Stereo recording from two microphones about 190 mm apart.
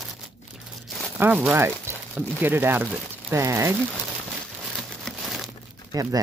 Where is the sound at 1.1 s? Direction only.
5° right (ahead or behind).